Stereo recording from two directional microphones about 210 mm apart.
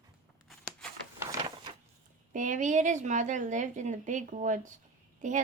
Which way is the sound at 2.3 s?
35° right (ahead or behind).